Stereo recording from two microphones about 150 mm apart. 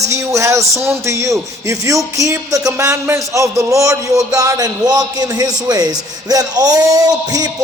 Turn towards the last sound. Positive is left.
turn(degrees=-25)  # may be behind; listen again after turning